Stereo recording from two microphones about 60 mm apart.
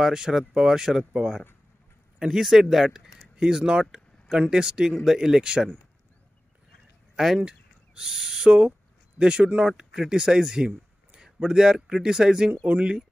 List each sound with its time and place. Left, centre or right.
0.0 s speech: centre
7.2 s speech: centre